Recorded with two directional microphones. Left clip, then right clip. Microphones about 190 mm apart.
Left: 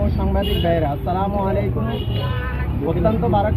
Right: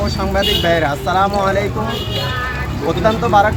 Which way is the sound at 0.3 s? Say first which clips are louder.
Right 6 dB; 10° right (ahead or behind).